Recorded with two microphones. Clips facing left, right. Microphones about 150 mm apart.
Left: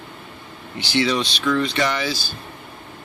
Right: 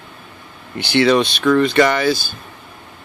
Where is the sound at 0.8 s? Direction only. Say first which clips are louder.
Right 7 dB; 60° right (ahead or behind).